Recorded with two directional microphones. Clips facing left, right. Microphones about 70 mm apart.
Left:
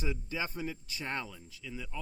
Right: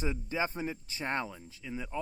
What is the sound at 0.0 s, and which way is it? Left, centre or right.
Speech, right.